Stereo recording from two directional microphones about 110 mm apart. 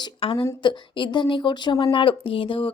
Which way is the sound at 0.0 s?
50° left (ahead or behind).